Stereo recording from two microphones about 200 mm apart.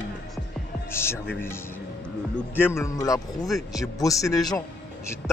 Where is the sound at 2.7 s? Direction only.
15° left (ahead or behind).